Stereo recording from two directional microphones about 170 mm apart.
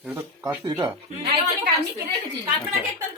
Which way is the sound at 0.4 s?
20° right (ahead or behind).